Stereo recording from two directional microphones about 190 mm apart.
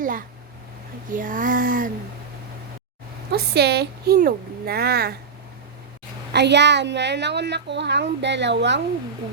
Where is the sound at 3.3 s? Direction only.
55° right (ahead or behind).